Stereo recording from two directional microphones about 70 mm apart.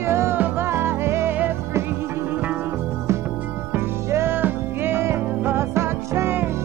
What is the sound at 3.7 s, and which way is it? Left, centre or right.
Music, right.